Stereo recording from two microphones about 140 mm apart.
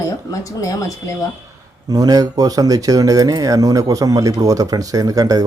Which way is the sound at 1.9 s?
25° right (ahead or behind).